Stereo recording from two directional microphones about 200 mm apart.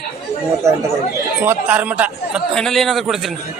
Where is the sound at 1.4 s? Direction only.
10° right (ahead or behind).